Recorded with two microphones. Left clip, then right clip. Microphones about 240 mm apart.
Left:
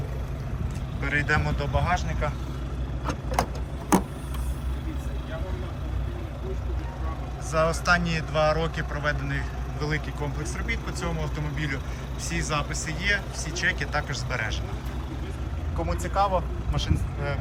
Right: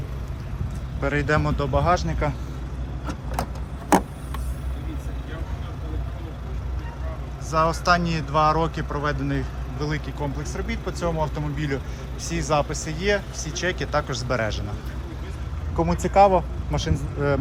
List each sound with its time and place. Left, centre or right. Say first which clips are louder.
1.0 s speech: right 2 dB; centre
7.5 s speech: right 3 dB; centre
15.9 s speech: right 8 dB; right